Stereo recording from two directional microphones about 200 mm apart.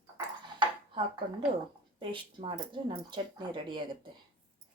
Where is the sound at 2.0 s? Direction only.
25° right (ahead or behind).